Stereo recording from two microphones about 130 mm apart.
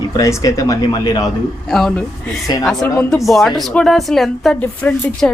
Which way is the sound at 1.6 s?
5° left (ahead or behind).